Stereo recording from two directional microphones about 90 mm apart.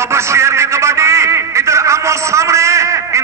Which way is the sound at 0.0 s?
30° right (ahead or behind).